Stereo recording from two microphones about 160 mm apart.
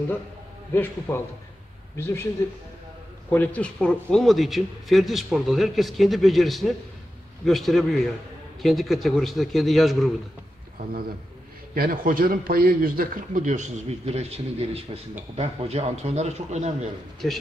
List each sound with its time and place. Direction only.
0.7 s a man's voice: 15° left (ahead or behind)
3.3 s a man's voice: 10° left (ahead or behind)
11.7 s a man's voice: 65° right (ahead or behind); by 16.9 s 45° right (ahead or behind)
17.2 s a man's voice: 5° left (ahead or behind)